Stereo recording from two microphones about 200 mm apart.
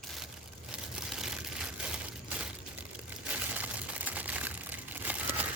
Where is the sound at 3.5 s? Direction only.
5° right (ahead or behind).